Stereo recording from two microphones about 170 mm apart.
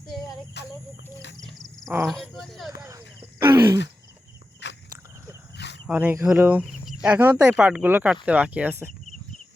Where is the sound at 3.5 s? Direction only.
25° right (ahead or behind).